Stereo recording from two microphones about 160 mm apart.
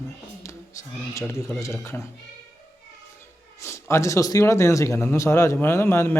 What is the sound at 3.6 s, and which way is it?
Speech, 20° left (ahead or behind).